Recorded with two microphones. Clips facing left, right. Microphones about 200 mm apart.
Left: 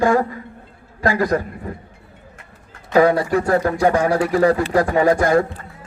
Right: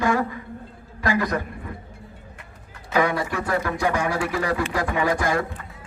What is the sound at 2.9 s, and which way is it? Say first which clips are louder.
Speech: left 8 dB; 35° left (ahead or behind).